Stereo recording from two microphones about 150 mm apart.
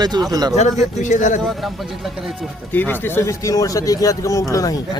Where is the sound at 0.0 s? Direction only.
25° right (ahead or behind).